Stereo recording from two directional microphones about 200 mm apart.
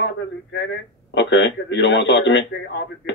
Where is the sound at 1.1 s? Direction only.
60° left (ahead or behind).